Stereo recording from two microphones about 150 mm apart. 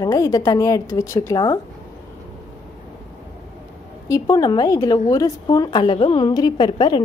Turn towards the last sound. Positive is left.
turn(degrees=30)  # may be behind; listen again after turning